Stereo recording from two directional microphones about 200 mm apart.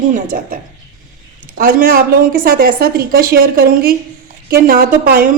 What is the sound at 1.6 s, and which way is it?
A woman's voice, 45° right (ahead or behind).